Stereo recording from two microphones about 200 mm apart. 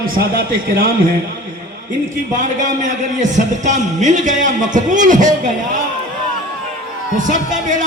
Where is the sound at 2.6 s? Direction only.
40° right (ahead or behind).